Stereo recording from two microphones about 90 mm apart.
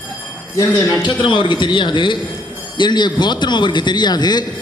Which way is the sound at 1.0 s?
65° left (ahead or behind).